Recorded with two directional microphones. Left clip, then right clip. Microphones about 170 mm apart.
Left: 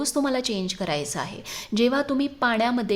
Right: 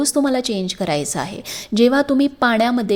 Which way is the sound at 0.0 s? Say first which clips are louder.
Right 6 dB; 20° right (ahead or behind).